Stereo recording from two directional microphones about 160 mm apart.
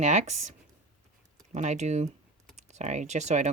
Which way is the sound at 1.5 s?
45° right (ahead or behind).